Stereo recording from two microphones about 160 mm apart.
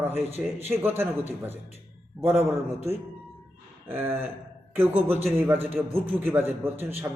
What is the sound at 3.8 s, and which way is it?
A man's voice, 15° right (ahead or behind).